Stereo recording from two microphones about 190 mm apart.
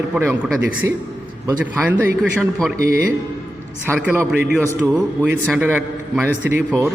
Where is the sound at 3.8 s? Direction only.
10° right (ahead or behind).